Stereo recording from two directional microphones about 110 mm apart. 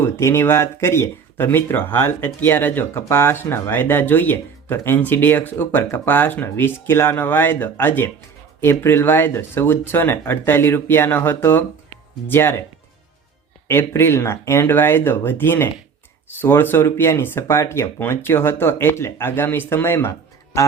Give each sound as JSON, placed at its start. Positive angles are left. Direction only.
{"t": 0.0, "sound": "speech", "side_deg": 25}
{"t": 13.7, "sound": "speech", "side_deg": 20}